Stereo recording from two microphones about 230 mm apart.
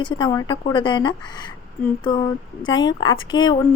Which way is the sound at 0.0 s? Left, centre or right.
Centre.